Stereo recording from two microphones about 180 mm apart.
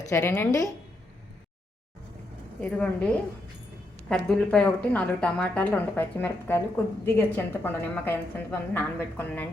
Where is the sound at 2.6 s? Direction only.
5° left (ahead or behind).